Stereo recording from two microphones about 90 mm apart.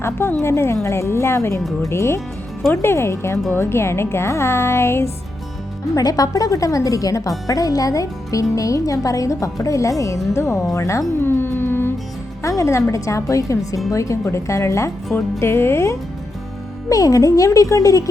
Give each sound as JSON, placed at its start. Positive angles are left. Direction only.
{"t": 0.0, "sound": "speech", "side_deg": 25}
{"t": 5.9, "sound": "speech", "side_deg": 45}